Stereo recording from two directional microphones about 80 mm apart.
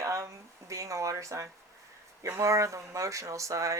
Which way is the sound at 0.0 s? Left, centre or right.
Right.